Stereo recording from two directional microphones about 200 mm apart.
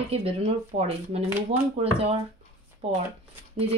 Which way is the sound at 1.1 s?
30° right (ahead or behind).